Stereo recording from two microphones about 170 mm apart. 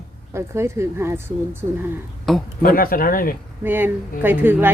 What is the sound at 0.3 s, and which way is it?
Speech, 15° right (ahead or behind).